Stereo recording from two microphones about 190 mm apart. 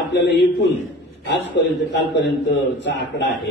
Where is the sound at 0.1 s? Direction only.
65° left (ahead or behind).